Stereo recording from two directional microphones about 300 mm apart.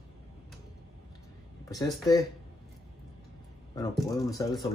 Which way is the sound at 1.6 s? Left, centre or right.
Centre.